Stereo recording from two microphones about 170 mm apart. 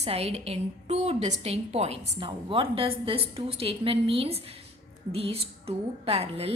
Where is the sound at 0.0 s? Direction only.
35° right (ahead or behind).